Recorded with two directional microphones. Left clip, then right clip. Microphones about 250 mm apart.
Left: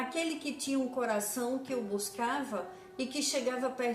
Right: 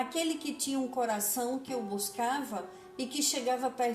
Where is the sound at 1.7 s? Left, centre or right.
Right.